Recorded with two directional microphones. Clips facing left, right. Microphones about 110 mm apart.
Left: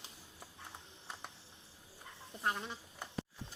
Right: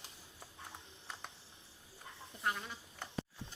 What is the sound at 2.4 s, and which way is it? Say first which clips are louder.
Speech: left 1 dB; 30° left (ahead or behind).